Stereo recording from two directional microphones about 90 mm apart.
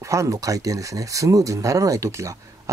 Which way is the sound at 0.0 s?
35° right (ahead or behind).